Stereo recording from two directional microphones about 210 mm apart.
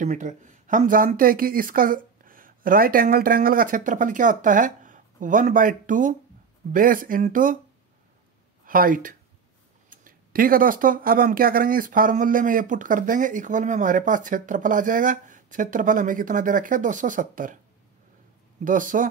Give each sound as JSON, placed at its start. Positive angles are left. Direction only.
{"t": 0.0, "sound": "speech", "side_deg": -35}
{"t": 8.6, "sound": "speech", "side_deg": -40}
{"t": 18.6, "sound": "speech", "side_deg": -40}